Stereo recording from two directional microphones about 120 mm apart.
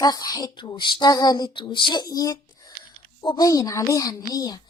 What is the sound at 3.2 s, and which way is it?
Speech, 40° left (ahead or behind).